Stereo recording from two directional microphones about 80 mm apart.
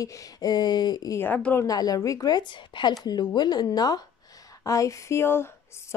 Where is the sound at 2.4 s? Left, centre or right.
Left.